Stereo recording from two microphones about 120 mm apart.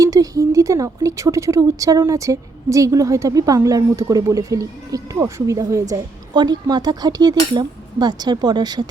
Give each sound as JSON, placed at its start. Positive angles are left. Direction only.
{"t": 0.0, "sound": "speech", "side_deg": -30}
{"t": 5.9, "sound": "speech", "side_deg": -35}